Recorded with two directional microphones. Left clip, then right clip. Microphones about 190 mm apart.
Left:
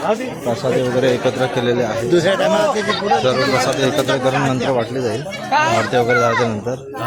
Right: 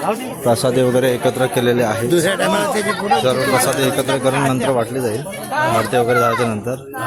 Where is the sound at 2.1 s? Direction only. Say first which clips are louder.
Left 3 dB; 70° right (ahead or behind).